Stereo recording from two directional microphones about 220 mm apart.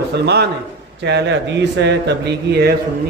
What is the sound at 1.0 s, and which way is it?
Speech, 50° right (ahead or behind).